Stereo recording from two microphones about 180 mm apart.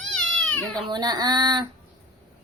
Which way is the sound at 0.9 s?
25° right (ahead or behind).